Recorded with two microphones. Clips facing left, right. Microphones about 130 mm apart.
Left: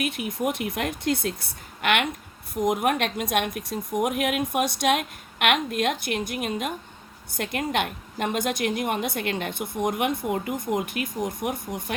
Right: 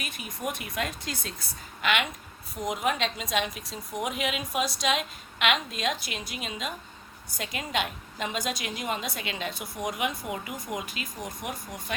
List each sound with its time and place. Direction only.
0.0 s a woman's voice: 60° left (ahead or behind)